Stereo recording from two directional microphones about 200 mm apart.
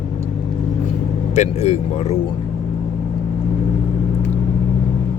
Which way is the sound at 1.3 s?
35° left (ahead or behind).